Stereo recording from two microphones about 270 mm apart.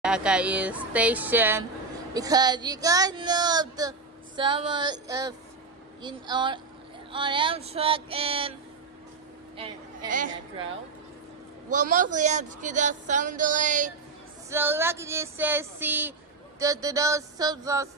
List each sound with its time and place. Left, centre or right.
0.0 s speech: centre; by 8.5 s right
9.6 s speech: right
11.7 s speech: right
14.5 s speech: centre